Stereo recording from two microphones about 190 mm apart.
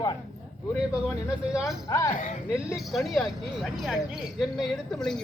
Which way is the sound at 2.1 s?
45° left (ahead or behind).